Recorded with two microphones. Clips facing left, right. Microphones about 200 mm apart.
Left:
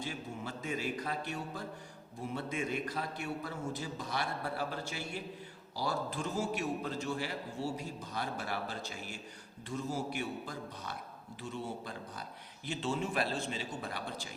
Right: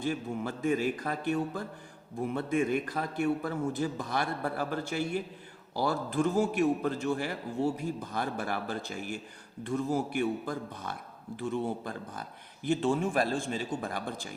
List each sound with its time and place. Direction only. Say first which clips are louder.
0.0 s a man's voice: right 8 dB; 50° right (ahead or behind)